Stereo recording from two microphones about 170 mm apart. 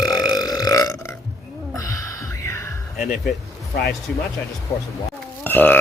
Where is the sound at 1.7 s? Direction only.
20° left (ahead or behind).